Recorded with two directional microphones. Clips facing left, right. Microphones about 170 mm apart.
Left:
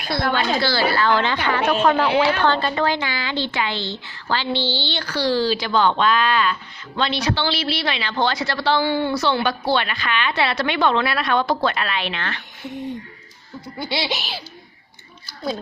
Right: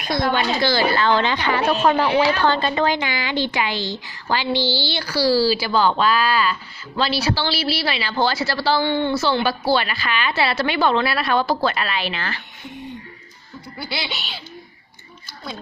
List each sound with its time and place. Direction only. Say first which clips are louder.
0.3 s a woman's voice: right 1 dB; 15° right (ahead or behind)
13.7 s speech: left 4 dB; 25° left (ahead or behind)
14.1 s speech: left 5 dB; 40° left (ahead or behind)